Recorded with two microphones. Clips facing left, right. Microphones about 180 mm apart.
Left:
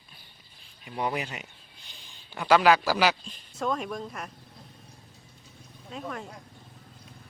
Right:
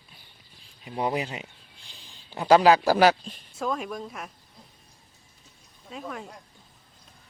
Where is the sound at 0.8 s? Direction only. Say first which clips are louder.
Right 3 dB; 30° right (ahead or behind).